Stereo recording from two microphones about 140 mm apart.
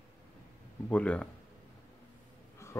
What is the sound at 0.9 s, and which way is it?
Speech, 10° left (ahead or behind).